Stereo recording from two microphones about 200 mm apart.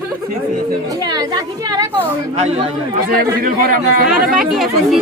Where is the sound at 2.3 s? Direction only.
30° right (ahead or behind).